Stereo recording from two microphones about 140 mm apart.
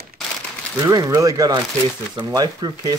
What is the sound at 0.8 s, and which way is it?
Speech, 25° right (ahead or behind).